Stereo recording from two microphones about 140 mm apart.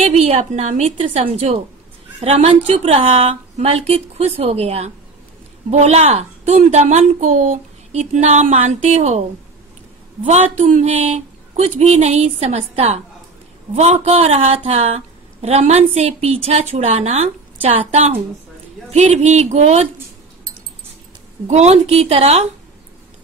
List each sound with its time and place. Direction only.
0.0 s speech: 50° right (ahead or behind)
10.5 s speech: 55° right (ahead or behind)
21.5 s speech: 50° right (ahead or behind)